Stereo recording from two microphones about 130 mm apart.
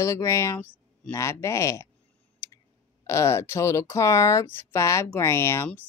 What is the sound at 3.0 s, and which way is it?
Speech, 25° left (ahead or behind).